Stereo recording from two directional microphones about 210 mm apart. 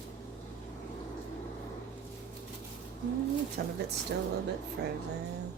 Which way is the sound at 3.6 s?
45° right (ahead or behind).